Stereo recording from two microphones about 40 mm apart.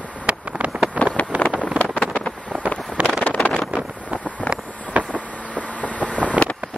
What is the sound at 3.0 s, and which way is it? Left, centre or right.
Vehicle, right.